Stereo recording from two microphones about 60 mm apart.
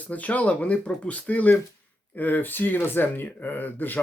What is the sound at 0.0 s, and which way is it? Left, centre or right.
Speech, left.